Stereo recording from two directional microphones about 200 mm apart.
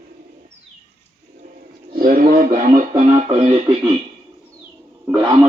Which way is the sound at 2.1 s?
45° right (ahead or behind).